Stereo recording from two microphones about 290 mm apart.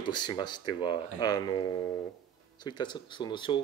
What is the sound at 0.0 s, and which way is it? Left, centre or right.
Speech, centre.